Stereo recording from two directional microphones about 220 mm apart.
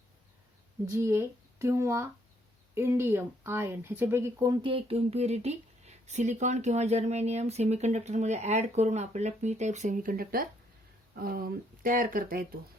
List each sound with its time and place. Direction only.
0.9 s speech: 10° right (ahead or behind)
4.6 s speech: 25° right (ahead or behind); by 12.5 s 40° right (ahead or behind)